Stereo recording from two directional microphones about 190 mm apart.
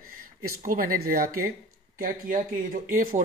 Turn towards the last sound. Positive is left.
turn(degrees=-50)  # may be behind; listen again after turning